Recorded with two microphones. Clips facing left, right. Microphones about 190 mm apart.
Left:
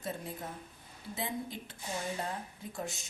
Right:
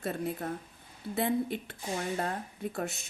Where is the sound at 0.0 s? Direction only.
65° right (ahead or behind).